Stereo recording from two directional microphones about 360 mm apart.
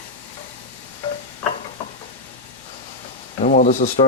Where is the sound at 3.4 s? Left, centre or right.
Left.